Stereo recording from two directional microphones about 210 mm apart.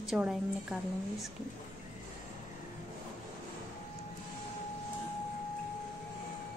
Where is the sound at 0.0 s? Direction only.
Centre (ahead or behind).